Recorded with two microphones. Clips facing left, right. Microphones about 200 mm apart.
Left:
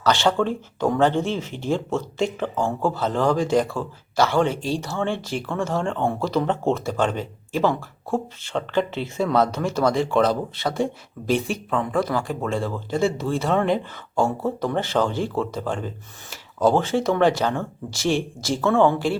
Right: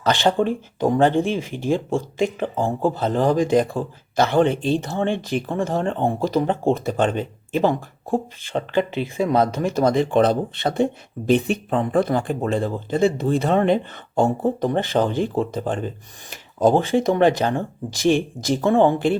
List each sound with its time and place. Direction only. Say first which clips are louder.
0.0 s speech: right 1 dB; 15° right (ahead or behind)